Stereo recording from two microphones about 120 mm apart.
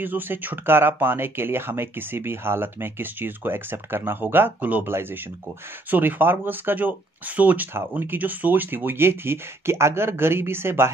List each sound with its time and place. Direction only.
0.0 s speech: 15° right (ahead or behind)